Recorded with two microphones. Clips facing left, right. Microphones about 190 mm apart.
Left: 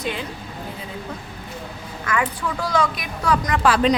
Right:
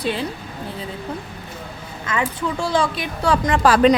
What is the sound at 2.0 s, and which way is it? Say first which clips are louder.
Speech: right 1 dB; 25° right (ahead or behind).